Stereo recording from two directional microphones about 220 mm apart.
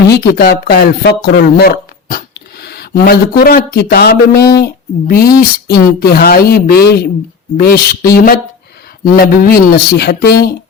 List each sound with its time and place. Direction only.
0.2 s speech: 40° left (ahead or behind)